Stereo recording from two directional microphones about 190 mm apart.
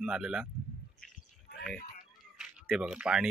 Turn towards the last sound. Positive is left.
turn(degrees=-5)  # may be behind; listen again after turning